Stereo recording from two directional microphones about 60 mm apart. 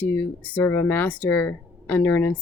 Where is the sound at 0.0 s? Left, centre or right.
Left.